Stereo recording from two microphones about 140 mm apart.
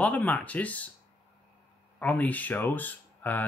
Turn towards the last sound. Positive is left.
turn(degrees=10)  # may be behind; listen again after turning